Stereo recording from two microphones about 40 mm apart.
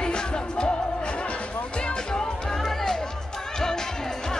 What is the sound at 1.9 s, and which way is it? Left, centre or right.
Music, centre.